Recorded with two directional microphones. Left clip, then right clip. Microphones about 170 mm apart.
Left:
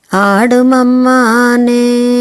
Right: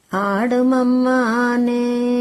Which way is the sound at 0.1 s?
30° left (ahead or behind).